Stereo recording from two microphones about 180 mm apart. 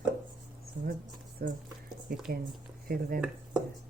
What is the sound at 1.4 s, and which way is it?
Speech, 55° right (ahead or behind).